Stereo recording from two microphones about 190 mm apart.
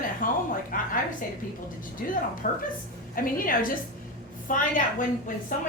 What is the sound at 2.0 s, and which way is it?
A woman's voice, 50° left (ahead or behind).